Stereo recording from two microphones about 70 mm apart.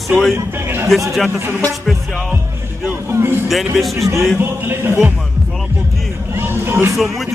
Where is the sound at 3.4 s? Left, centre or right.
Centre.